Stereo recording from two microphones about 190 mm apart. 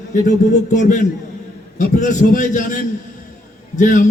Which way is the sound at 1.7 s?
45° left (ahead or behind).